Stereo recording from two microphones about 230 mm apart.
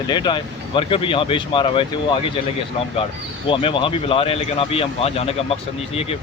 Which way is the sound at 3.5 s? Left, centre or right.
Left.